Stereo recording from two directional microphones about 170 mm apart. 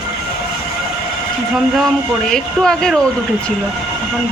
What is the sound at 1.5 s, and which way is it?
Speech, centre (ahead or behind).